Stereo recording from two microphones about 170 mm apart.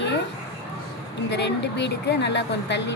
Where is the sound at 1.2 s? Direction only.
90° left.